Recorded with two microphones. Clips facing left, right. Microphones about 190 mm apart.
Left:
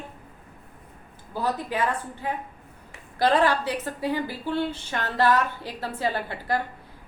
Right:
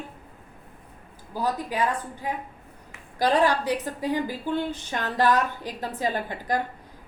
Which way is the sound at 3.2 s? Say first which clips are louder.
Even; 15° right (ahead or behind).